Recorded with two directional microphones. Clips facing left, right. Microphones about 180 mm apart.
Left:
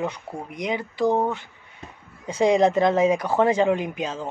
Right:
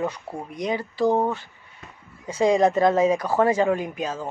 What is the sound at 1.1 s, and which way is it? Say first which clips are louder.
Speech: even; 10° right (ahead or behind).